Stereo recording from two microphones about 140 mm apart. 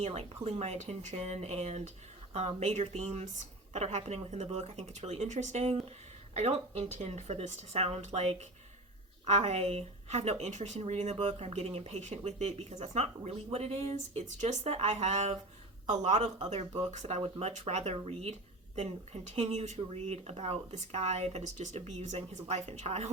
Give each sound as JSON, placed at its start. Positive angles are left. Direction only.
{"t": 0.0, "sound": "speech", "side_deg": -50}